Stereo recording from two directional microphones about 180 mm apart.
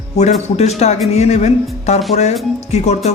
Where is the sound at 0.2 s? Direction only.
40° left (ahead or behind).